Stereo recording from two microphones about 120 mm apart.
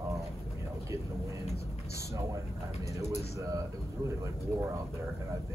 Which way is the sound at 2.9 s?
25° right (ahead or behind).